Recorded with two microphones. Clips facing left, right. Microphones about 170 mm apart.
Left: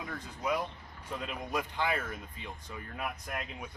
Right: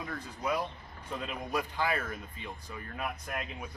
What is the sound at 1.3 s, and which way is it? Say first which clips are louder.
Speech: right 1 dB; 20° left (ahead or behind).